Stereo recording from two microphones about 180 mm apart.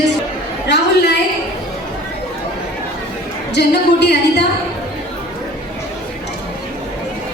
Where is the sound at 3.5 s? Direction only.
70° left (ahead or behind).